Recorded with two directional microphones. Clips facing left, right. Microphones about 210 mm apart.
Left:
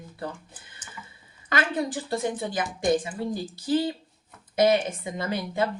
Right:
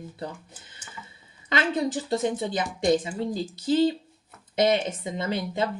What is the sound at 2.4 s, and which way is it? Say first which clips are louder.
A woman's voice: right 2 dB; 25° right (ahead or behind).